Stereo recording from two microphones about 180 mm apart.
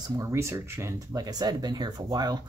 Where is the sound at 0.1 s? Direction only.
15° right (ahead or behind).